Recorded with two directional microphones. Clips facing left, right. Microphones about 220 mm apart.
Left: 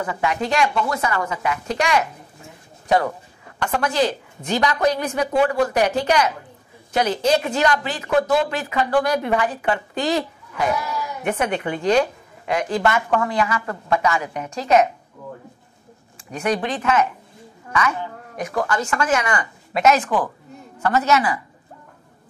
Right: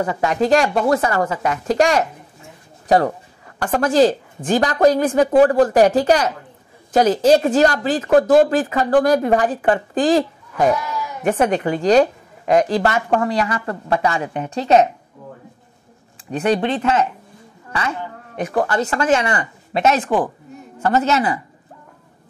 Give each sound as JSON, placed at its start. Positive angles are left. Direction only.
{"t": 0.0, "sound": "a woman's voice", "side_deg": -40}
{"t": 3.6, "sound": "a woman's voice", "side_deg": -45}
{"t": 16.3, "sound": "speech", "side_deg": -30}